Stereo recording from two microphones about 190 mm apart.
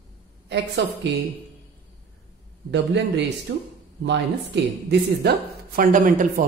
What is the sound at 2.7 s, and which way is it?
Speech, 65° right (ahead or behind).